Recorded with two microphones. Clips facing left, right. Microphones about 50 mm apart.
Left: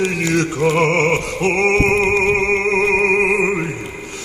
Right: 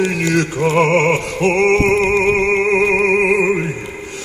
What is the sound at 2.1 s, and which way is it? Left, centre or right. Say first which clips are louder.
Music: right 2 dB; right.